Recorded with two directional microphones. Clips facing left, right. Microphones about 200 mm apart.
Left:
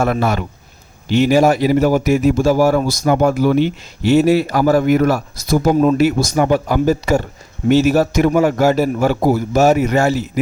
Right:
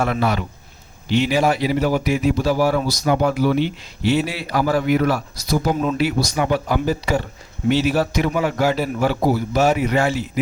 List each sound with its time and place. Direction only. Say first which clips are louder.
0.0 s a man's voice: left 3 dB; 45° left (ahead or behind)